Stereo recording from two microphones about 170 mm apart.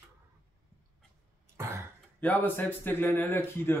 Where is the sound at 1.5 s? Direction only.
15° right (ahead or behind).